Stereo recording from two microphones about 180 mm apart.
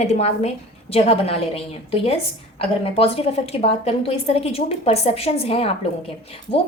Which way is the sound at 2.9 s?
30° left (ahead or behind).